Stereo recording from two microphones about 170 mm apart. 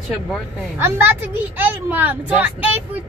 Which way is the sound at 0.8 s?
10° right (ahead or behind).